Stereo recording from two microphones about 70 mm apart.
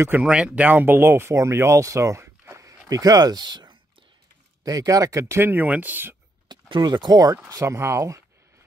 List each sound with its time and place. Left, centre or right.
0.2 s speech: centre; by 2.8 s right
2.9 s speech: right
4.6 s speech: right
5.4 s speech: right
6.5 s speech: right
7.4 s speech: right